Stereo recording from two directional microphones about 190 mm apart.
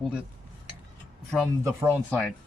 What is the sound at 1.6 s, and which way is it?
Speech, 15° right (ahead or behind).